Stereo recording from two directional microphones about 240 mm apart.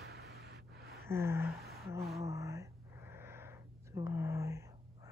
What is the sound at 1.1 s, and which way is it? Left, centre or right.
Speech, centre.